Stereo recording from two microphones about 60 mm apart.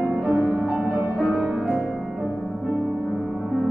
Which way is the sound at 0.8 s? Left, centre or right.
Centre.